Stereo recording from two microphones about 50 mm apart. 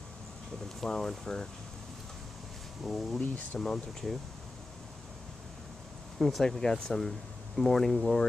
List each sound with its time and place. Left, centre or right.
0.7 s speech: centre
2.8 s speech: centre
6.1 s speech: centre
6.4 s speech: centre